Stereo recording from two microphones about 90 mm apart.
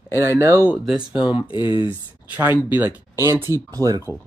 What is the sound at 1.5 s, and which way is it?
Speech, 55° left (ahead or behind).